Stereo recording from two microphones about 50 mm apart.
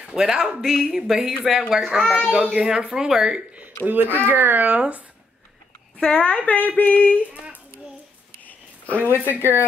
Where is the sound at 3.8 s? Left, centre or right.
Right.